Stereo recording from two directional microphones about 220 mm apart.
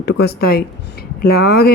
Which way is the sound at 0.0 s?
45° left (ahead or behind).